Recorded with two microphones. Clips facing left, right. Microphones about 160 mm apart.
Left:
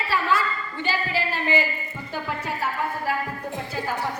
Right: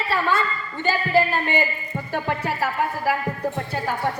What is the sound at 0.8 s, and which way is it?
Speech, 50° right (ahead or behind).